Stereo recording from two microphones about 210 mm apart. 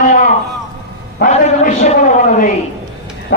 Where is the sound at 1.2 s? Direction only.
35° left (ahead or behind).